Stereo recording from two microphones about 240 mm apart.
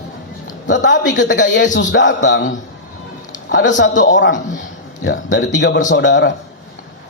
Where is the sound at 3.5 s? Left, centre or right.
Left.